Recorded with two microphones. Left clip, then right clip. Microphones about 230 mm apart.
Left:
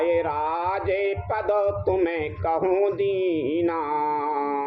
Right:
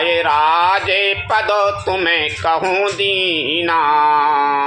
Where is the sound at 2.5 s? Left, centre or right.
Right.